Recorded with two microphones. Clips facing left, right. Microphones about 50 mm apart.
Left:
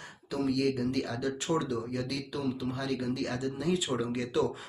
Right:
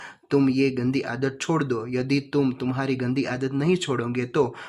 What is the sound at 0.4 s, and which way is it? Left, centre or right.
Speech, right.